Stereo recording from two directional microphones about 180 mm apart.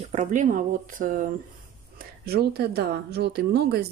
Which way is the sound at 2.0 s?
60° right (ahead or behind).